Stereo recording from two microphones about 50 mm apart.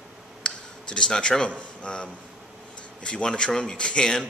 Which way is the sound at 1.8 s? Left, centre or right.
Centre.